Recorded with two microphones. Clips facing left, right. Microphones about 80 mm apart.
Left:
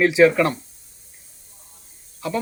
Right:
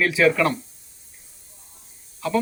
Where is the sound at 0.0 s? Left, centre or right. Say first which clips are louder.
Left 4 dB; centre.